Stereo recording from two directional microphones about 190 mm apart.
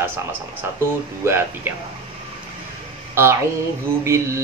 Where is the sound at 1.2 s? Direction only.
15° right (ahead or behind).